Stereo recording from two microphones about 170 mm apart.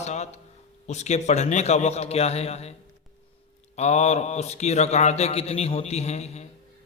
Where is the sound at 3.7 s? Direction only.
40° left (ahead or behind).